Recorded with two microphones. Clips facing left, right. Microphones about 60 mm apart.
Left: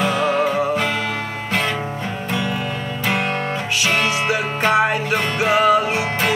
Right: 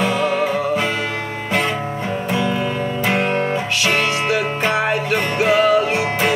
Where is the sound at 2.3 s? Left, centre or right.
Right.